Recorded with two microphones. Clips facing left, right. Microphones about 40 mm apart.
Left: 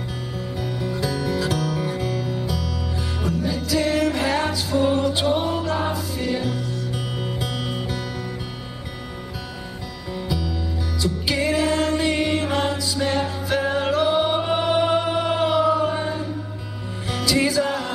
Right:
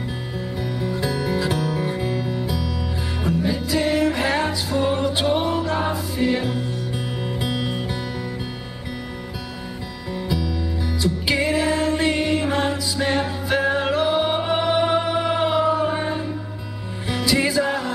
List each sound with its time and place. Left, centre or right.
0.7 s music: centre
0.9 s music: centre
6.3 s music: right
7.2 s music: centre
11.0 s music: centre
15.3 s choir: centre
17.1 s music: centre